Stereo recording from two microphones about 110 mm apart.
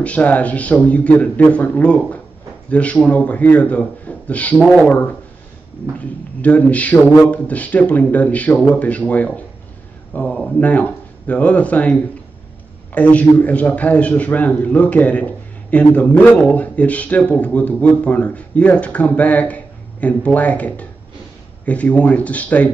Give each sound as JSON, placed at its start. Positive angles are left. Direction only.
{"t": 0.0, "sound": "a man's voice", "side_deg": 15}